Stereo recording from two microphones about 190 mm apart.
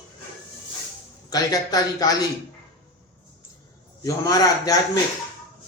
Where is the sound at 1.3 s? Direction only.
20° left (ahead or behind).